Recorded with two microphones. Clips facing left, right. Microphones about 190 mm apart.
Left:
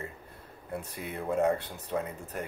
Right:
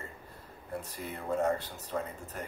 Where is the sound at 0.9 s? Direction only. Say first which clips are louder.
Left 3 dB; 60° left (ahead or behind).